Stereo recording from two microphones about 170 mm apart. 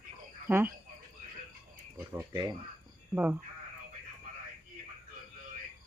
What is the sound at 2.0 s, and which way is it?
Speech, 15° right (ahead or behind).